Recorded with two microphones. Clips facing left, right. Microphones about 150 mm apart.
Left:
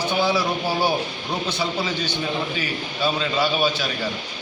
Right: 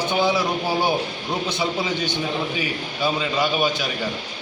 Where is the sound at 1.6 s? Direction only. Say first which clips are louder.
Right 1 dB; 20° right (ahead or behind).